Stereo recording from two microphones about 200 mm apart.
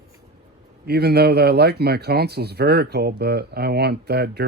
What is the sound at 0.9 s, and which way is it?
Speech, 50° right (ahead or behind).